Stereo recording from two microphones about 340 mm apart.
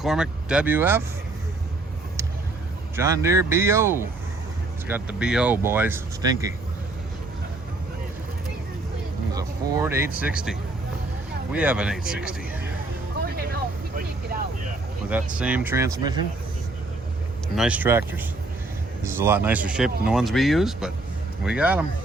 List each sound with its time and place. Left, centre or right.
0.0 s speech: centre
2.9 s speech: centre
9.3 s speech: centre
13.2 s vehicle: right
15.1 s speech: centre
17.5 s speech: centre